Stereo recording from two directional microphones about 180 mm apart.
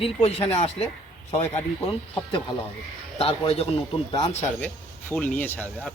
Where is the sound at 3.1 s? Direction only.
35° left (ahead or behind).